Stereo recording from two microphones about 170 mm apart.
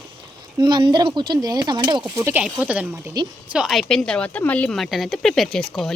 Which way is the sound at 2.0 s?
15° right (ahead or behind).